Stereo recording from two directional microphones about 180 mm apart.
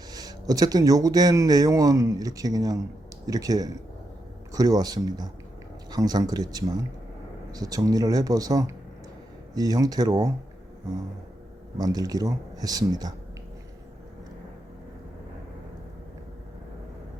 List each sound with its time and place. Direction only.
0.1 s speech: 20° right (ahead or behind)
11.8 s speech: 20° right (ahead or behind)